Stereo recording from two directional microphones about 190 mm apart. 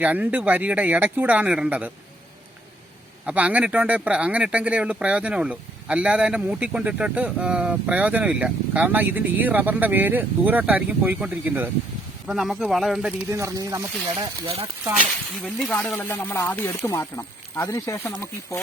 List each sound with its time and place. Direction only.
0.0 s speech: 10° right (ahead or behind)
3.2 s speech: 5° right (ahead or behind)
15.4 s speech: 5° left (ahead or behind)